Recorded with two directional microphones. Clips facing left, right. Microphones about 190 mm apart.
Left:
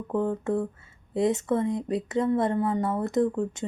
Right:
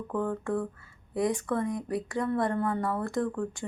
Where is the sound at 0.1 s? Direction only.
20° left (ahead or behind).